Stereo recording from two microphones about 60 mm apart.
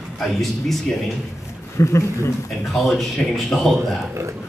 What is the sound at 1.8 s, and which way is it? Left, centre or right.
Speech, left.